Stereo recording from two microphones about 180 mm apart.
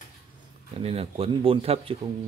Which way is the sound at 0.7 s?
35° right (ahead or behind).